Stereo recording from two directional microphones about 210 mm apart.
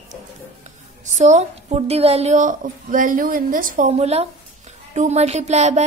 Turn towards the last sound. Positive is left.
turn(degrees=-30)  # may be behind; listen again after turning